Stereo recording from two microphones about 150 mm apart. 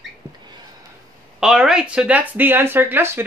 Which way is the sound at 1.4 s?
5° right (ahead or behind).